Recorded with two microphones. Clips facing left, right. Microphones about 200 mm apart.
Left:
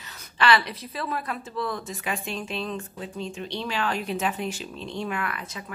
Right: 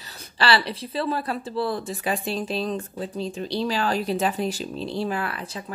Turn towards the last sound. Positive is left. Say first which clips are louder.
# right 3 dB
turn(degrees=-35)  # may be behind; listen again after turning